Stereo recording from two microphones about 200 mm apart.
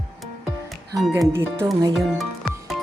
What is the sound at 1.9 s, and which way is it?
Speech, centre (ahead or behind).